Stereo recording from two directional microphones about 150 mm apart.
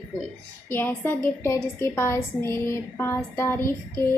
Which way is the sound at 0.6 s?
15° left (ahead or behind).